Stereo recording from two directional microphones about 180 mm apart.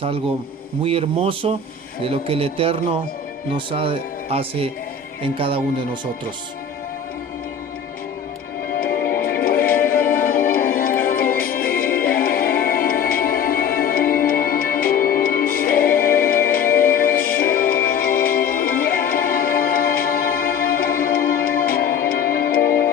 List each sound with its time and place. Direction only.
0.9 s speech: 30° right (ahead or behind)
8.8 s music: 55° left (ahead or behind)